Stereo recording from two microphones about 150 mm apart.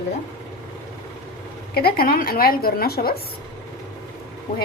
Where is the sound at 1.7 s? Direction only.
90° left.